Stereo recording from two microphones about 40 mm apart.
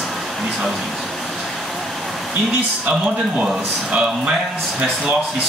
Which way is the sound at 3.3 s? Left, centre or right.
Right.